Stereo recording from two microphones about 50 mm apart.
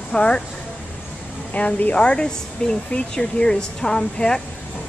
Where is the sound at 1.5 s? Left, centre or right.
Left.